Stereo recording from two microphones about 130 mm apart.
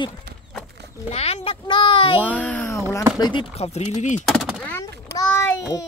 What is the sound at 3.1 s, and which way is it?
Speech, 30° left (ahead or behind).